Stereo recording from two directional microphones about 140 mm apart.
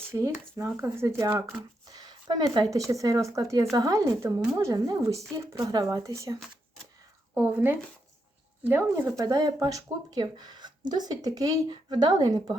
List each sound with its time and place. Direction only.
0.1 s speech: 20° right (ahead or behind)
1.9 s a sound: 30° right (ahead or behind)
2.7 s speech: 25° right (ahead or behind)